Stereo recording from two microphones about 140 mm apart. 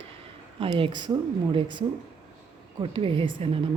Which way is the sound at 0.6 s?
40° right (ahead or behind).